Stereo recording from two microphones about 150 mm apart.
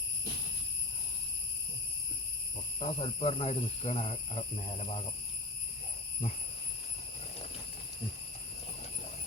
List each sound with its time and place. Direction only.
2.8 s cricket: 40° left (ahead or behind)